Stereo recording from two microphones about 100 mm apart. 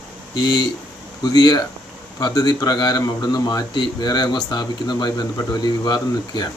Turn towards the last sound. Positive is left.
turn(degrees=45)  # may be behind; listen again after turning